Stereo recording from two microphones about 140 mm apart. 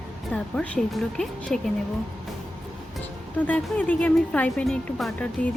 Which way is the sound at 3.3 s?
10° left (ahead or behind).